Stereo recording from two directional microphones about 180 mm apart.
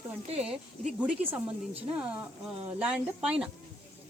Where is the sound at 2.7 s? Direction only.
10° right (ahead or behind).